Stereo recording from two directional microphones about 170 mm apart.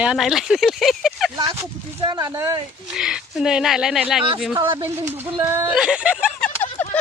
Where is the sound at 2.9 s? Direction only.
5° right (ahead or behind).